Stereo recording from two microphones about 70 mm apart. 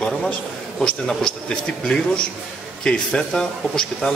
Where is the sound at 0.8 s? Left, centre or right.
Centre.